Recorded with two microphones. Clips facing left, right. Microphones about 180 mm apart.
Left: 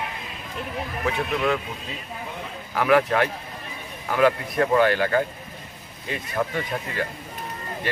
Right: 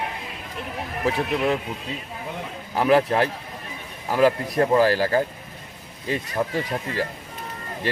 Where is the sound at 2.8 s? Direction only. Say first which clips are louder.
Right 1 dB; 30° right (ahead or behind).